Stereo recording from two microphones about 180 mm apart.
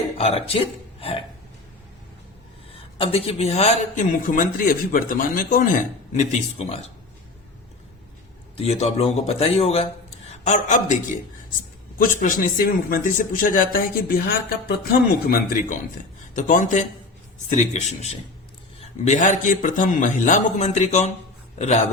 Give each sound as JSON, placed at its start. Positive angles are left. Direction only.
{"t": 0.2, "sound": "speech", "side_deg": 35}
{"t": 2.7, "sound": "speech", "side_deg": 30}
{"t": 6.1, "sound": "speech", "side_deg": 35}
{"t": 8.5, "sound": "speech", "side_deg": 35}
{"t": 11.9, "sound": "speech", "side_deg": 50}